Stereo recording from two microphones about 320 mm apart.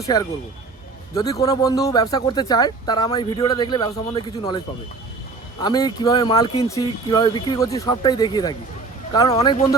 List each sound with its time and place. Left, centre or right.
0.0 s speech: centre
5.6 s speech: centre